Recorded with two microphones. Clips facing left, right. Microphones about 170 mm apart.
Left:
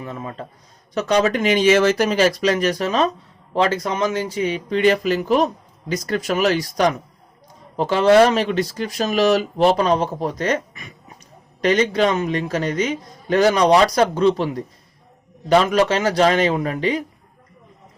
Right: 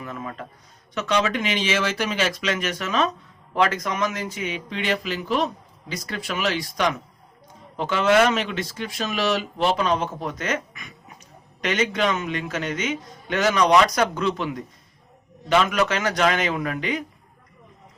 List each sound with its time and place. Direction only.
0.0 s a man's voice: 30° left (ahead or behind)